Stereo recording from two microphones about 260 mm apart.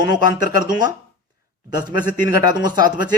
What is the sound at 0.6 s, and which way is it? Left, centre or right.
Speech, centre.